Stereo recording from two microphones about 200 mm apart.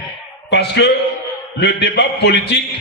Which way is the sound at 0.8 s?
60° left (ahead or behind).